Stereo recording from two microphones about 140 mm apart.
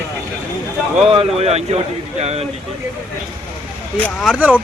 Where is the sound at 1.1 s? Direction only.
50° right (ahead or behind).